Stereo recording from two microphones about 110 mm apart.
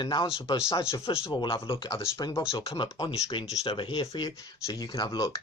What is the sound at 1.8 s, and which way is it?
Speech, 25° left (ahead or behind).